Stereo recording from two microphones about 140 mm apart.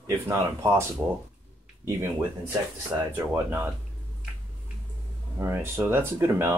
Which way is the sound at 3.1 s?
15° right (ahead or behind).